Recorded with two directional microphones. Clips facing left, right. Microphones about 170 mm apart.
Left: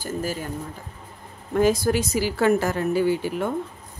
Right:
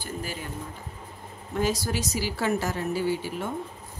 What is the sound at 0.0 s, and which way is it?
Speech, 45° left (ahead or behind).